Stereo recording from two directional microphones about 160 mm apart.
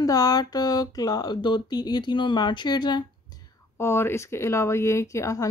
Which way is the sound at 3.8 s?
15° left (ahead or behind).